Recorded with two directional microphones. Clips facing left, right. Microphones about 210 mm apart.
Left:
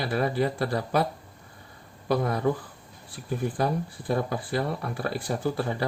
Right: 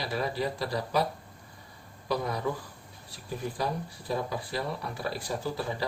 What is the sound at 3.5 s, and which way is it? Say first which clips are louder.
Speech: left 5 dB; 55° left (ahead or behind).